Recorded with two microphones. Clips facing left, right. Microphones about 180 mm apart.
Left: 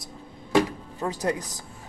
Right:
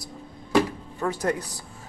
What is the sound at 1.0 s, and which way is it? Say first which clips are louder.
Speech: right 2 dB; 25° left (ahead or behind).